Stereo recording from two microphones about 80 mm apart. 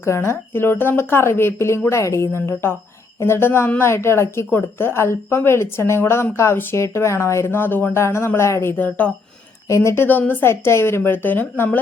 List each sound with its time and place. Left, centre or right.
0.0 s a woman's voice: left
8.7 s a woman's voice: left
9.6 s a woman's voice: left
10.5 s a woman's voice: left